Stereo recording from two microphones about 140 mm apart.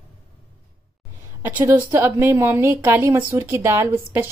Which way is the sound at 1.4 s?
15° right (ahead or behind).